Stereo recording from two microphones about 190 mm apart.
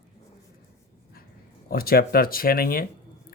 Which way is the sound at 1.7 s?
55° left (ahead or behind).